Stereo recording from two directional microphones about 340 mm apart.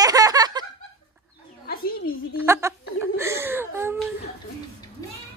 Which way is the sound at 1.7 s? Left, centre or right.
Left.